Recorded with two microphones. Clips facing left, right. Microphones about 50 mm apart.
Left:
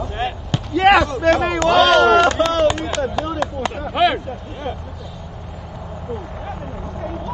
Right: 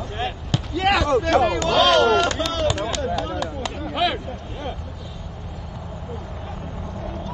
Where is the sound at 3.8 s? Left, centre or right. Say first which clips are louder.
Left 6 dB; centre.